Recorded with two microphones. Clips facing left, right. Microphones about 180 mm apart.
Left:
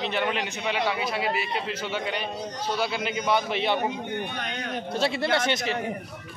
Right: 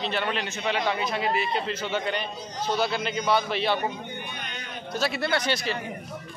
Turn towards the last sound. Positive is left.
turn(degrees=20)  # may be behind; listen again after turning